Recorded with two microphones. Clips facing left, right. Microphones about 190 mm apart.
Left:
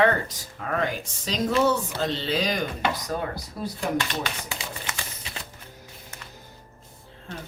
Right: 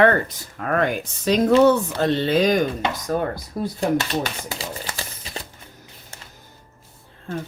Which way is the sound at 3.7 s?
40° right (ahead or behind).